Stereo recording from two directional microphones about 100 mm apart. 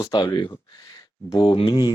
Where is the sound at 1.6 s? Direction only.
50° left (ahead or behind).